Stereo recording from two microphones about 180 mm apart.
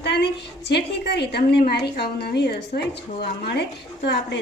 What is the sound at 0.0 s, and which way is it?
A woman's voice, 70° left (ahead or behind).